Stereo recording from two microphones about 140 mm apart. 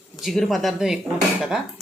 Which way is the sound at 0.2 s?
Centre (ahead or behind).